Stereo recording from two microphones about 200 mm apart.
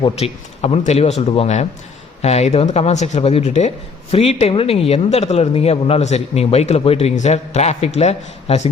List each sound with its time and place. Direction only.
0.0 s speech: 30° left (ahead or behind)